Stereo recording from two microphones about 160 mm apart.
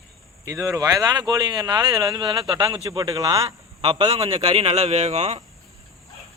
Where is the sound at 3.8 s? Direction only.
35° right (ahead or behind).